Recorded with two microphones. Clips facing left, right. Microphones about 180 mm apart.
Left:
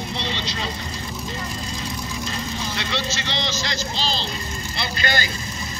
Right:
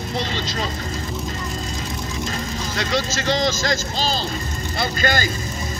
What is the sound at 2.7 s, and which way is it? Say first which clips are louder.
Speech: right 8 dB; 45° right (ahead or behind).